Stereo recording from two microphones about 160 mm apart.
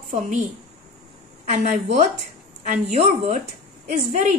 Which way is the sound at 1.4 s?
45° right (ahead or behind).